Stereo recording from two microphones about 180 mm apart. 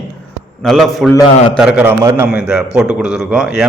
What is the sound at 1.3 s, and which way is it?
Speech, 40° left (ahead or behind).